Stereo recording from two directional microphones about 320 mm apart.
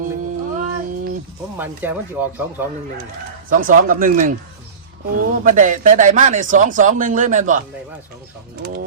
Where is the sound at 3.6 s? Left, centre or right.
Right.